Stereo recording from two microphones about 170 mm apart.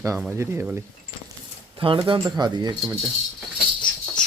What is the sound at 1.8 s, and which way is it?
Speech, 30° right (ahead or behind).